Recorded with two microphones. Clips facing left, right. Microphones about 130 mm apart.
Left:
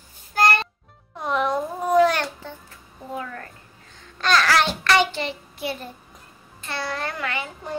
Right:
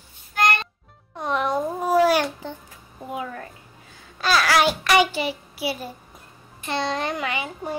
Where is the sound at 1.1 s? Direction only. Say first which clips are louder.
Even; centre (ahead or behind).